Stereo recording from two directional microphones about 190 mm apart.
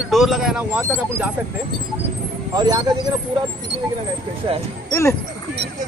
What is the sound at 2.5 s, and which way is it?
Speech, 20° right (ahead or behind).